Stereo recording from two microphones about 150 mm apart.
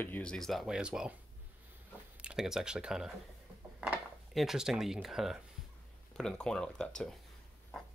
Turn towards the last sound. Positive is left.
turn(degrees=5)  # may be behind; listen again after turning